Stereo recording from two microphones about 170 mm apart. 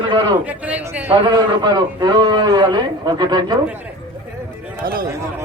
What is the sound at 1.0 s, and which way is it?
A man's voice, 25° right (ahead or behind).